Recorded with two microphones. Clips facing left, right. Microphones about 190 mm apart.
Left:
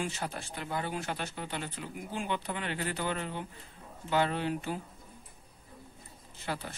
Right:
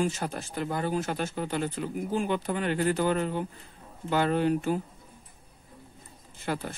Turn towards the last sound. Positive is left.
turn(degrees=-50)  # may be behind; listen again after turning